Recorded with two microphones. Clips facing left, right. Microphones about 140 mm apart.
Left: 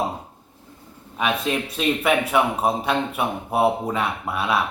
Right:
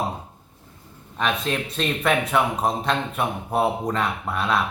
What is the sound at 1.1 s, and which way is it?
Speech, 5° left (ahead or behind).